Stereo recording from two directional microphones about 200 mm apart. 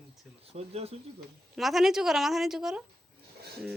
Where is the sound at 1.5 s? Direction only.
Centre (ahead or behind).